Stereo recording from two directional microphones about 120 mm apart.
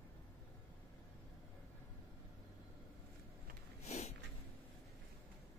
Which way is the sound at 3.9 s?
70° left (ahead or behind).